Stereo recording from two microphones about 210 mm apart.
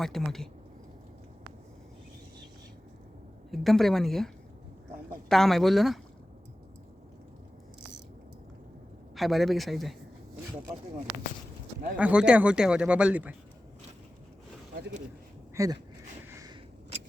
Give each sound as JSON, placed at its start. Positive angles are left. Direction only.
{"t": 0.0, "sound": "speech", "side_deg": 0}
{"t": 3.5, "sound": "speech", "side_deg": 0}
{"t": 5.3, "sound": "speech", "side_deg": 0}
{"t": 9.1, "sound": "speech", "side_deg": 0}
{"t": 11.9, "sound": "speech", "side_deg": -5}
{"t": 15.5, "sound": "speech", "side_deg": -15}